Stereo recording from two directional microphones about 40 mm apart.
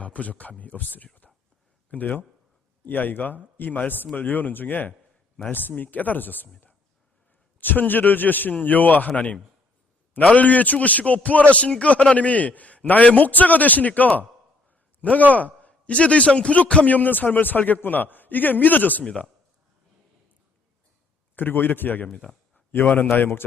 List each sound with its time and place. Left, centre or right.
0.0 s a man's voice: left
2.8 s a man's voice: left
7.6 s a man's voice: left
9.0 s a man's voice: left
19.0 s a man's voice: left
21.3 s a man's voice: left
22.1 s speech: centre
22.7 s a man's voice: left